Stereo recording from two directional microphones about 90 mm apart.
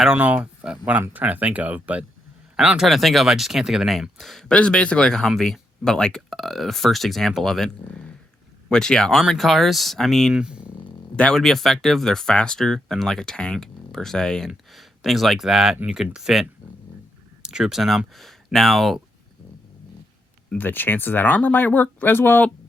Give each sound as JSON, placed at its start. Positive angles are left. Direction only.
{"t": 0.2, "sound": "speech", "side_deg": -20}
{"t": 10.3, "sound": "speech", "side_deg": -10}
{"t": 11.2, "sound": "speech", "side_deg": 5}
{"t": 20.5, "sound": "speech", "side_deg": 20}